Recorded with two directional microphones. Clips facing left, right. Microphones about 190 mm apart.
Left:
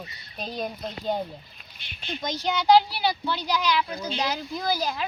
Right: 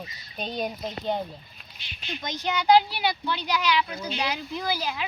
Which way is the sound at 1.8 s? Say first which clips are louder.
Left 2 dB; 55° left (ahead or behind).